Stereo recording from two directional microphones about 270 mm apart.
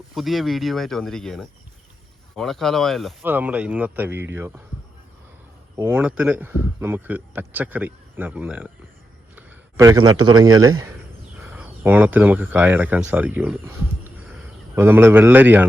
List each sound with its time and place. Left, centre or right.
0.1 s speech: centre
5.7 s speech: centre
9.3 s a sound: centre
10.0 s a man's voice: right
10.2 s speech: centre